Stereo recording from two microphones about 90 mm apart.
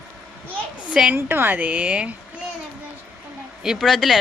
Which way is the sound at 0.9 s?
10° right (ahead or behind).